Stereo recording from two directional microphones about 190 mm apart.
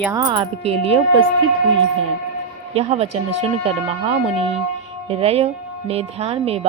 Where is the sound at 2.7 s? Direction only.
35° right (ahead or behind).